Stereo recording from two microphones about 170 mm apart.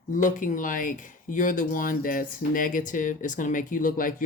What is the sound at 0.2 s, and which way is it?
Speech, 50° left (ahead or behind).